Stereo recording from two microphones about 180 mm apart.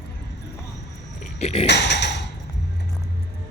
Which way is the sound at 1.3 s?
35° left (ahead or behind).